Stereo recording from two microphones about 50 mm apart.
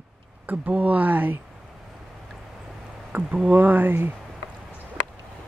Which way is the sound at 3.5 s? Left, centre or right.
Right.